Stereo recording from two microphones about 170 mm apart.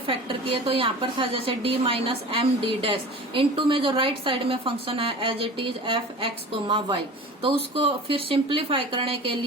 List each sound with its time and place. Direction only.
0.1 s a woman's voice: 30° right (ahead or behind)